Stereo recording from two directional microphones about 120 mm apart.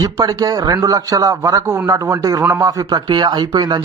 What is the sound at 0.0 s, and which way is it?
A man's voice, 30° right (ahead or behind).